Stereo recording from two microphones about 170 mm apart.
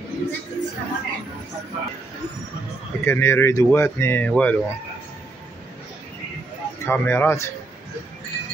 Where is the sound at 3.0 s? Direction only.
15° left (ahead or behind).